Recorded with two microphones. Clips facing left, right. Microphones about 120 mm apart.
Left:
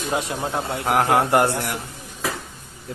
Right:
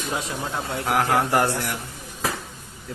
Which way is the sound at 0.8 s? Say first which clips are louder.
Left 3 dB; 25° left (ahead or behind).